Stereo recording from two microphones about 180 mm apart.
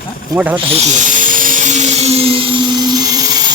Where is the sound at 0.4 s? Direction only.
10° right (ahead or behind).